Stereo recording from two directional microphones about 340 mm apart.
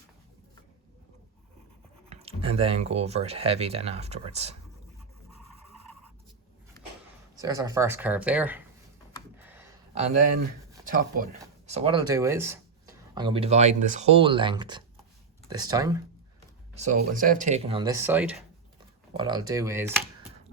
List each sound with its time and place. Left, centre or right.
2.0 s speech: centre
7.3 s speech: centre
9.4 s a sound: centre
9.9 s speech: centre
16.7 s speech: right; by 18.4 s centre
18.8 s speech: centre